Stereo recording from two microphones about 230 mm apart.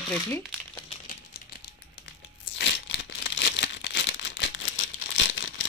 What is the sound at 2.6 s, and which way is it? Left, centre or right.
Crumpling, left.